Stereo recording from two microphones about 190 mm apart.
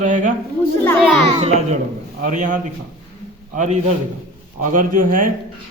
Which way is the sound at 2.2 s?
45° right (ahead or behind).